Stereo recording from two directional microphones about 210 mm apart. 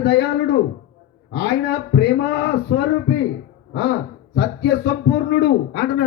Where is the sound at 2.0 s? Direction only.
55° left (ahead or behind).